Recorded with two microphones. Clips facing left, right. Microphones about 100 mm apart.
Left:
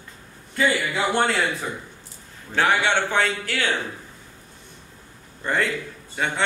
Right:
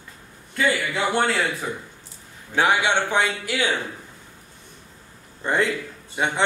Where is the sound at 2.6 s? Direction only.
15° right (ahead or behind).